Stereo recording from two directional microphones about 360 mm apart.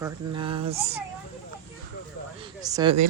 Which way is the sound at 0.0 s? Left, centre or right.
Centre.